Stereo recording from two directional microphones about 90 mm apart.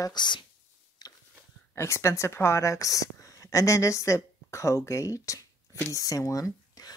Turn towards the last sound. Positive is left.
turn(degrees=40)  # may be behind; listen again after turning